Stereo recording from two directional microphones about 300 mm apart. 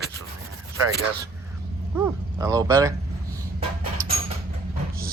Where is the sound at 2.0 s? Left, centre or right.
Centre.